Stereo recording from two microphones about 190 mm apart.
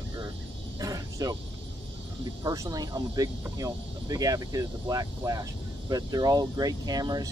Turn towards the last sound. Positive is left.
turn(degrees=-20)  # may be behind; listen again after turning